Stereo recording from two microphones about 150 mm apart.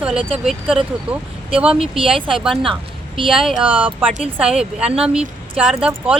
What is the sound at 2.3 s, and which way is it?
Speech, centre (ahead or behind).